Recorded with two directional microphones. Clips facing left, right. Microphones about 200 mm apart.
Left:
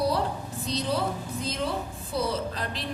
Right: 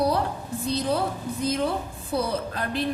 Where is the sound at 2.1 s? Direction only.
55° right (ahead or behind).